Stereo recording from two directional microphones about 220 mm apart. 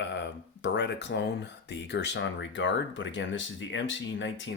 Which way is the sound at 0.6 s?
50° left (ahead or behind).